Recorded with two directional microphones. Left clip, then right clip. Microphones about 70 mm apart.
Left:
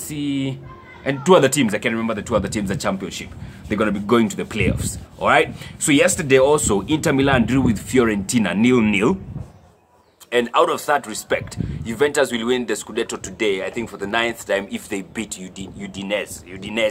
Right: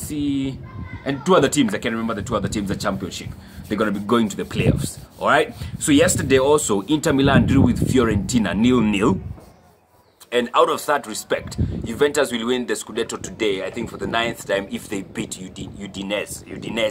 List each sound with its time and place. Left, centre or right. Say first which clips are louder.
0.1 s speech: right 1 dB; left
6.8 s speech: even; centre
8.8 s speech: left 1 dB; centre
10.3 s speech: even; left
10.7 s speech: left 1 dB; centre
11.8 s speech: left 1 dB; left
15.8 s speech: left 1 dB; centre